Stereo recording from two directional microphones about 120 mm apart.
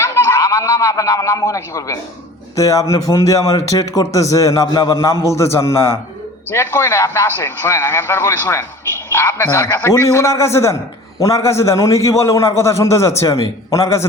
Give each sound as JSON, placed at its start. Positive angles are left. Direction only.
{"t": 0.0, "sound": "a man's voice", "side_deg": 20}